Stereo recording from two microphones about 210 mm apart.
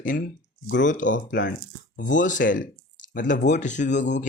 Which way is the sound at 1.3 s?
55° left (ahead or behind).